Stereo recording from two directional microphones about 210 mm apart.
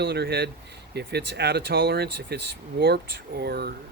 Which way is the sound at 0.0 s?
50° right (ahead or behind).